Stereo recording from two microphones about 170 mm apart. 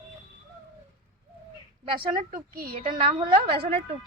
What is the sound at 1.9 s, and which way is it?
Speech, 55° right (ahead or behind).